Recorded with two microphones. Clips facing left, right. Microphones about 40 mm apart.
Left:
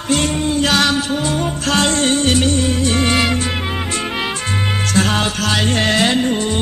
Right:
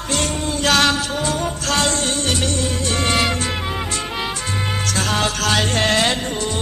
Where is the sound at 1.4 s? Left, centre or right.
Left.